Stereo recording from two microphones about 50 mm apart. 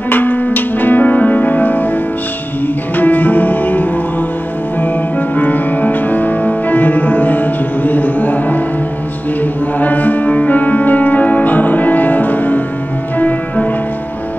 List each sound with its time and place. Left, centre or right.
0.1 s music: left
3.0 s music: left
5.3 s music: left
9.8 s music: left